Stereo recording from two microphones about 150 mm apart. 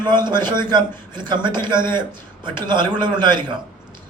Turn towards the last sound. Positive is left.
turn(degrees=-30)  # may be behind; listen again after turning